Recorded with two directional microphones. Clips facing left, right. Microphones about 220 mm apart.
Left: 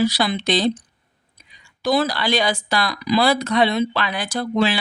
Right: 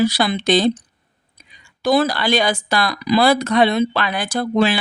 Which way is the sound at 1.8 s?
50° right (ahead or behind).